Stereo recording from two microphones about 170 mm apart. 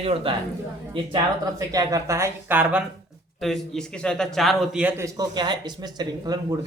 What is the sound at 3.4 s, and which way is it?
A man's voice, centre (ahead or behind).